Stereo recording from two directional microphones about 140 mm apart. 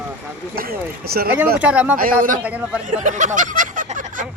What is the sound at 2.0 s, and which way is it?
Speech, 75° right (ahead or behind).